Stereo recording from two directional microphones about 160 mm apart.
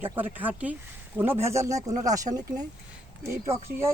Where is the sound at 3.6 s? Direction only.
15° right (ahead or behind).